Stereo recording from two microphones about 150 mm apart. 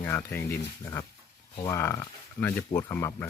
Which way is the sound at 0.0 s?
15° left (ahead or behind).